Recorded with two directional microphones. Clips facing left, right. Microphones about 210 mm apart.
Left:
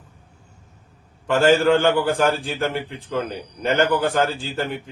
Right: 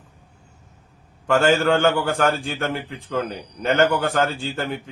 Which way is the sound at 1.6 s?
Centre (ahead or behind).